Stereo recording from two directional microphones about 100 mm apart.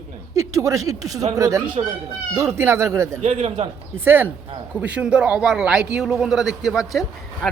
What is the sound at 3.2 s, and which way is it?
Speech, 90° right.